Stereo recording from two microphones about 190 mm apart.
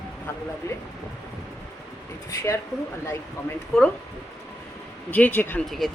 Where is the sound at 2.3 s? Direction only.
15° left (ahead or behind).